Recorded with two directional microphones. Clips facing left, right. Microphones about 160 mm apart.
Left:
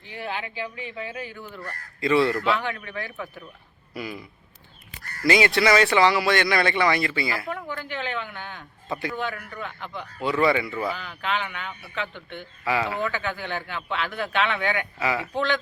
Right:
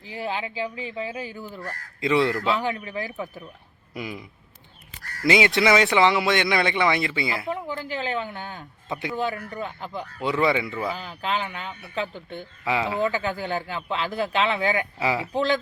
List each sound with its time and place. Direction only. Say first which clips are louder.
0.1 s speech: right 3 dB; 25° right (ahead or behind)
1.6 s speech: left 1 dB; 15° right (ahead or behind)
5.2 s speech: even; 20° right (ahead or behind); by 8.6 s 35° right (ahead or behind)
8.9 s speech: left 1 dB; 20° right (ahead or behind)
9.6 s speech: right 3 dB; 35° right (ahead or behind)
10.2 s speech: left 1 dB; 20° right (ahead or behind)
10.9 s speech: right 1 dB; 35° right (ahead or behind)
12.6 s speech: right 1 dB; 20° right (ahead or behind)
13.1 s speech: right 3 dB; 35° right (ahead or behind)